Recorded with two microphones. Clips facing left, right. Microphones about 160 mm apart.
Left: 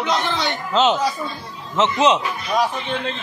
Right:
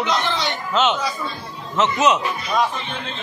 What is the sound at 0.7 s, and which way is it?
Speech, 35° left (ahead or behind).